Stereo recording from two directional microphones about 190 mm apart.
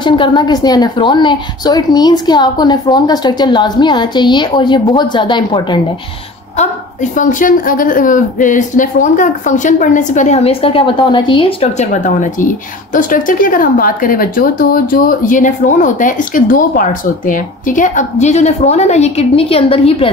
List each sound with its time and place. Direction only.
0.0 s a woman's voice: 25° left (ahead or behind)
6.6 s a woman's voice: 40° left (ahead or behind)